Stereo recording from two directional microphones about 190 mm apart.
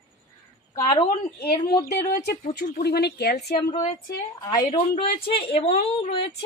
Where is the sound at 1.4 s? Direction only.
55° left (ahead or behind).